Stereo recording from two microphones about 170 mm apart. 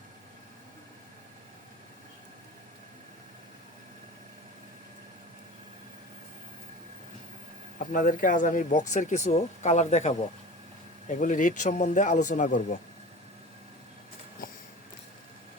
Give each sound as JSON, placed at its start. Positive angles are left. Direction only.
{"t": 7.8, "sound": "speech", "side_deg": 50}
{"t": 11.2, "sound": "speech", "side_deg": 50}